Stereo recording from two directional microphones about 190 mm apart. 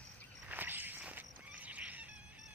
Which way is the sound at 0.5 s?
10° right (ahead or behind).